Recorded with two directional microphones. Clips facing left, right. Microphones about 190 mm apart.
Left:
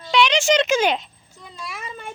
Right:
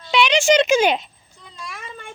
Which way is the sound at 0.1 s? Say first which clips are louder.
Right 2 dB; 5° right (ahead or behind).